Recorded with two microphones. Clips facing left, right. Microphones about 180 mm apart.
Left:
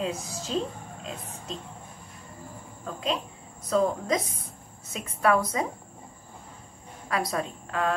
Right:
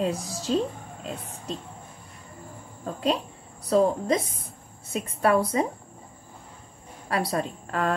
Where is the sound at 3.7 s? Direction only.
30° right (ahead or behind).